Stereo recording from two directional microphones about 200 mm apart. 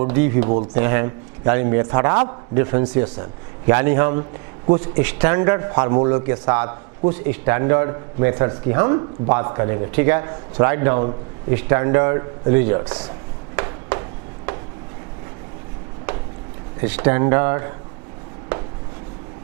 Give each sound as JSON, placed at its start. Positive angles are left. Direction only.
{"t": 0.0, "sound": "speech", "side_deg": -15}
{"t": 13.6, "sound": "a sound", "side_deg": -15}
{"t": 16.8, "sound": "speech", "side_deg": -10}